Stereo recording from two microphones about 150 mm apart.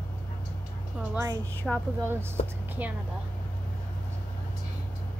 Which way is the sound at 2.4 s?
50° left (ahead or behind).